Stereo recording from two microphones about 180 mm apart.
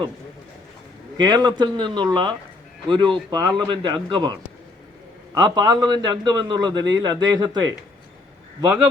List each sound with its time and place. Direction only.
1.1 s a man's voice: 25° right (ahead or behind)